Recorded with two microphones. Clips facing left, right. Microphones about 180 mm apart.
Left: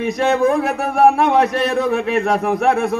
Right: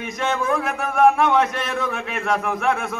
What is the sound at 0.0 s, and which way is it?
A man's voice, 40° left (ahead or behind).